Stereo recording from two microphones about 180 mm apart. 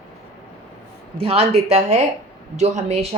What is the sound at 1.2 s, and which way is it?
A woman's voice, 35° right (ahead or behind).